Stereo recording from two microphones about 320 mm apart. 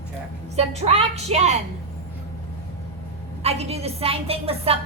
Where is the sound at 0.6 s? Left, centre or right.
Centre.